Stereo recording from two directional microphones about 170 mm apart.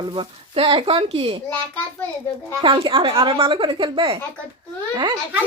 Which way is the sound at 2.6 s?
30° right (ahead or behind).